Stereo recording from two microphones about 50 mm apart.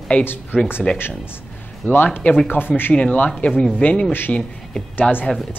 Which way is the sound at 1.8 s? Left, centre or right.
Left.